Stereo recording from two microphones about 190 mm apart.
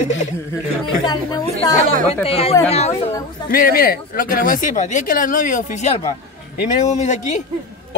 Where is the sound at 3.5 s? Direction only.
50° left (ahead or behind).